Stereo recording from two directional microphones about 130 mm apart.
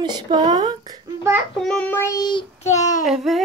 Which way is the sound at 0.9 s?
20° right (ahead or behind).